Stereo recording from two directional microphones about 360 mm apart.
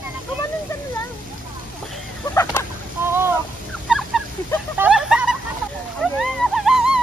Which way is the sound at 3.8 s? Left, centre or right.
Centre.